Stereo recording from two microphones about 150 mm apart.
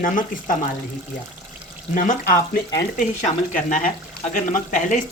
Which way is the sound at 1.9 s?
60° left (ahead or behind).